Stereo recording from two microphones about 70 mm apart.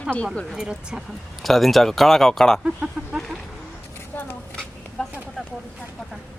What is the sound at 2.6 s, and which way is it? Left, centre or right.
Speech, centre.